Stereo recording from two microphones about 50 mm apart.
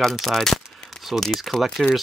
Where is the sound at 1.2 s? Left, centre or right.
Centre.